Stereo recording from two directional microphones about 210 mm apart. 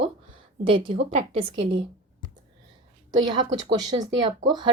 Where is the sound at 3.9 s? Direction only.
20° right (ahead or behind).